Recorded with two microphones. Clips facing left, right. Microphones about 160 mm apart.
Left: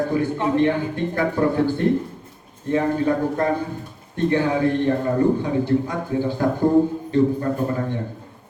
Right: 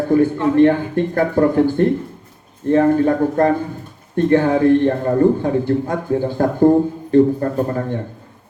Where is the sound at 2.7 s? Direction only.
55° right (ahead or behind).